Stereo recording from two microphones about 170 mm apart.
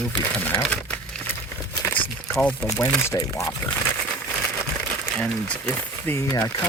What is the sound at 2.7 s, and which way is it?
Speech, 15° left (ahead or behind).